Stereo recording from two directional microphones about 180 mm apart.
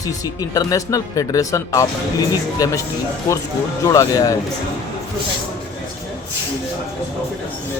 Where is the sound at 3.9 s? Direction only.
20° left (ahead or behind).